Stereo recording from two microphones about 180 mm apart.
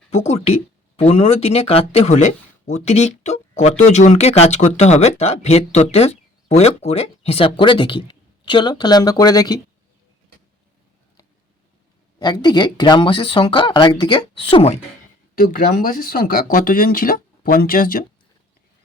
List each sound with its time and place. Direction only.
0.3 s speech: 35° left (ahead or behind)
12.2 s speech: 25° left (ahead or behind)
15.4 s speech: 55° left (ahead or behind)